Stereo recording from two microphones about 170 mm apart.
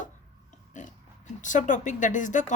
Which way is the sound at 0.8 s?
45° left (ahead or behind).